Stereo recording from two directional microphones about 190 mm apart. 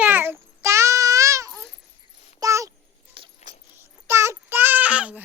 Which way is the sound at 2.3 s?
15° right (ahead or behind).